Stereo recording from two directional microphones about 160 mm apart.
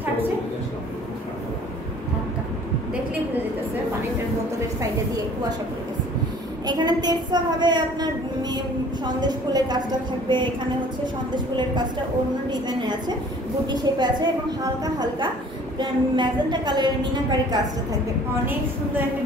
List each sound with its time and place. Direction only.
6.6 s a woman's voice: 25° right (ahead or behind)
12.4 s a woman's voice: 25° right (ahead or behind)